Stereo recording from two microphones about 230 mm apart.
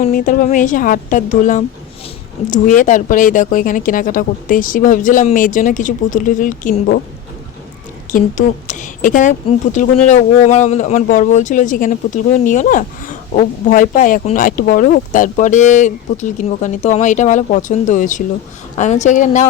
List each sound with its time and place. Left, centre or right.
0.0 s speech: left
8.1 s speech: left